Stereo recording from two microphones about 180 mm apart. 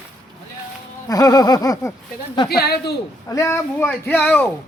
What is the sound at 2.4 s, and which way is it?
Speech, 60° left (ahead or behind).